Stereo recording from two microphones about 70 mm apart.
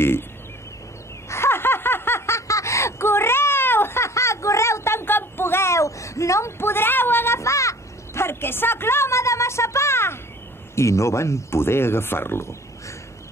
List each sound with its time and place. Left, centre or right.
1.3 s snicker: left
10.8 s speech: left